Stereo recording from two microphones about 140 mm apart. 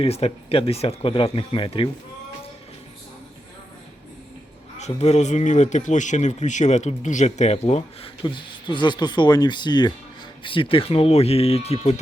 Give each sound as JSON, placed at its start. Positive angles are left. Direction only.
{"t": 0.0, "sound": "speech", "side_deg": 45}
{"t": 4.8, "sound": "speech", "side_deg": 50}
{"t": 8.2, "sound": "speech", "side_deg": 35}